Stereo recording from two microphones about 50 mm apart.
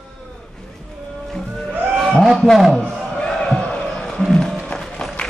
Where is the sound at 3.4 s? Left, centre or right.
Centre.